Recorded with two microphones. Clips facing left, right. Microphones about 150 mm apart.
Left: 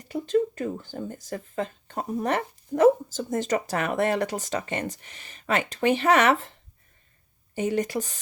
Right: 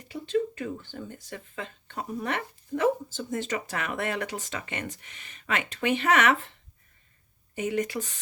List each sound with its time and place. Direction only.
0.1 s speech: 40° left (ahead or behind)
7.5 s speech: 35° left (ahead or behind)